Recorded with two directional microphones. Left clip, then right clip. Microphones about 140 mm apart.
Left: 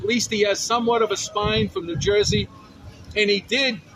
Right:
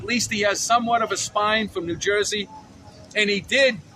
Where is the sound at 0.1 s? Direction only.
25° right (ahead or behind).